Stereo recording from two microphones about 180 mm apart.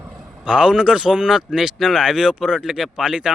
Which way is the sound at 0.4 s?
5° right (ahead or behind).